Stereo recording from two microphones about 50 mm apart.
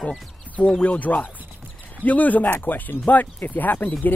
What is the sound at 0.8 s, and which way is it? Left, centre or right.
Speech, left.